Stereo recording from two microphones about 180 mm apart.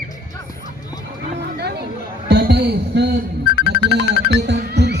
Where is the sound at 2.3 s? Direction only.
60° right (ahead or behind).